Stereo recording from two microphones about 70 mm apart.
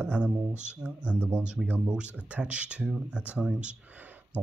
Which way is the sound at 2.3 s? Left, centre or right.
Centre.